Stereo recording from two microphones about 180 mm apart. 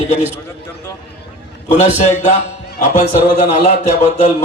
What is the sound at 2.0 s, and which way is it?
A man's voice, 40° left (ahead or behind).